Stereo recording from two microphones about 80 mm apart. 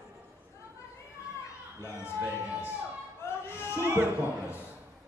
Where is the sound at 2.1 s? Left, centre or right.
Right.